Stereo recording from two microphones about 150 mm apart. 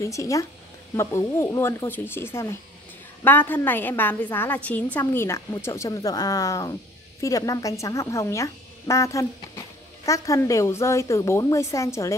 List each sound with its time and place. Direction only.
0.0 s speech: 20° left (ahead or behind)